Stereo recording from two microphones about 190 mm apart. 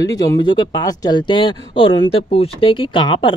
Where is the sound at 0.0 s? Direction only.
20° left (ahead or behind).